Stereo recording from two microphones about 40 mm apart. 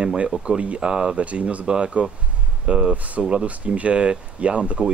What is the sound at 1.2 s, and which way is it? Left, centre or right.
Speech, right.